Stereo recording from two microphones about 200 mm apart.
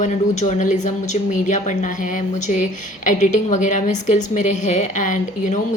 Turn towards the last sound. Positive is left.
turn(degrees=40)  # may be behind; listen again after turning